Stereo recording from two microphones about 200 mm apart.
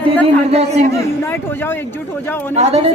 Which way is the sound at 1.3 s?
10° left (ahead or behind).